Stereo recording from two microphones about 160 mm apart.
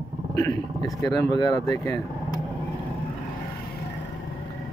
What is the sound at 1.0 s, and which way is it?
Speech, 20° left (ahead or behind).